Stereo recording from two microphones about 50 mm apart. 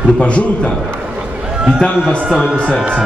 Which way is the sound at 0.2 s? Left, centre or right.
Left.